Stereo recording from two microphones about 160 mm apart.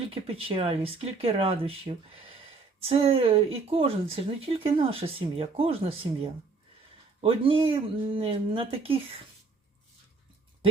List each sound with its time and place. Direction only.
0.1 s speech: 35° right (ahead or behind)